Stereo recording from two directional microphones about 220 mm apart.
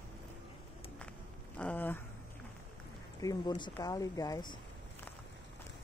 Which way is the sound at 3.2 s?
15° left (ahead or behind).